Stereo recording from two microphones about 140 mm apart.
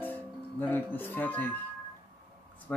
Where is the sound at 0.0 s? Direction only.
10° left (ahead or behind).